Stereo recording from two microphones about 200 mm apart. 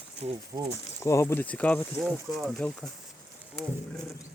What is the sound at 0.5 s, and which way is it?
Speech, 20° right (ahead or behind).